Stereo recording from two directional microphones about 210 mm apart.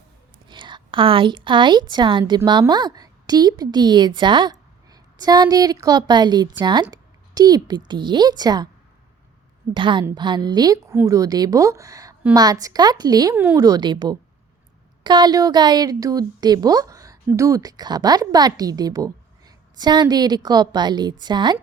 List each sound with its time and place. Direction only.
0.4 s a woman's voice: 20° right (ahead or behind)
6.8 s a sound: 15° right (ahead or behind)
7.9 s a woman's voice: 20° right (ahead or behind)
9.7 s a woman's voice: 20° right (ahead or behind)